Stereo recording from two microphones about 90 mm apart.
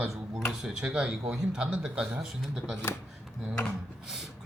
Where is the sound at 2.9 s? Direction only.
30° left (ahead or behind).